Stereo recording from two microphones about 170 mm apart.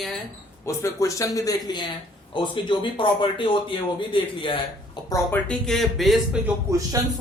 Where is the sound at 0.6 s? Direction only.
15° left (ahead or behind).